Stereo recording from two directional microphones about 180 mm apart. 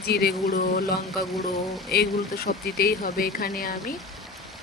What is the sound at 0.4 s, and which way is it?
Speech, 55° left (ahead or behind).